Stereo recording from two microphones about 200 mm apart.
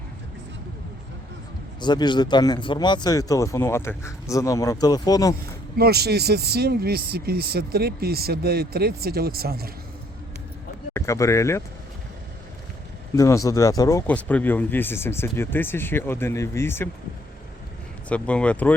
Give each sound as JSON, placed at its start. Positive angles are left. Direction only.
{"t": 1.8, "sound": "speech", "side_deg": 20}
{"t": 5.7, "sound": "speech", "side_deg": -50}
{"t": 10.9, "sound": "speech", "side_deg": 15}
{"t": 13.1, "sound": "speech", "side_deg": 15}
{"t": 18.1, "sound": "speech", "side_deg": 5}